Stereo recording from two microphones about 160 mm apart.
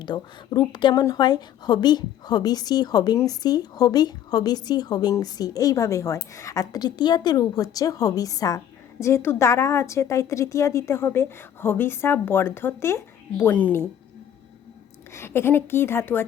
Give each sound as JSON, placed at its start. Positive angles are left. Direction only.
{"t": 0.0, "sound": "a woman's voice", "side_deg": 25}
{"t": 15.1, "sound": "a woman's voice", "side_deg": 15}